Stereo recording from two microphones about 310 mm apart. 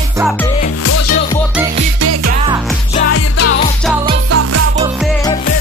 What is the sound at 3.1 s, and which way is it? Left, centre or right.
Music, left.